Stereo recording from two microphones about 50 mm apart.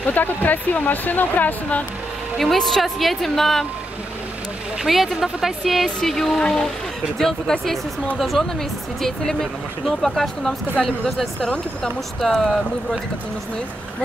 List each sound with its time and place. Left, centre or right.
0.0 s speech: left
2.3 s speech: centre
4.8 s speech: centre